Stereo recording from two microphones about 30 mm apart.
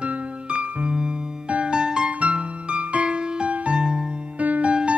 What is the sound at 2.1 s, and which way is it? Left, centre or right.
Music, right.